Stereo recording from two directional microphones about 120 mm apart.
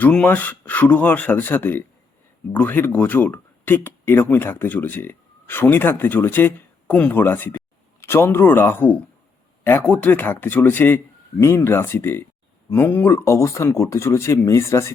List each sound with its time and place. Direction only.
0.0 s speech: 10° left (ahead or behind)